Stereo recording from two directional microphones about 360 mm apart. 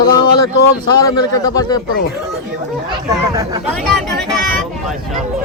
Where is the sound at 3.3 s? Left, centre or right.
Centre.